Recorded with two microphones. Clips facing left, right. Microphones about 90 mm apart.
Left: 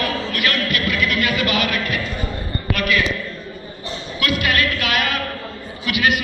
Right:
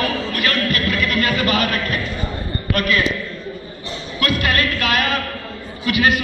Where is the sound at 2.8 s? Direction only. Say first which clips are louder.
Right 1 dB; 35° right (ahead or behind).